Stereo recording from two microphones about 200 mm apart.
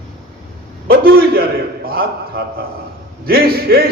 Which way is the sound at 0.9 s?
50° right (ahead or behind).